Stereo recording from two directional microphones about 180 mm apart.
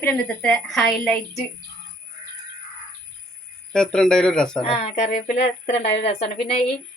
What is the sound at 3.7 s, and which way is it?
Speech, 5° left (ahead or behind).